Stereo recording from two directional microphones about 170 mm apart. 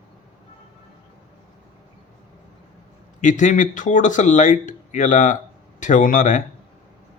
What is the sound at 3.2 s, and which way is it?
Speech, 50° left (ahead or behind).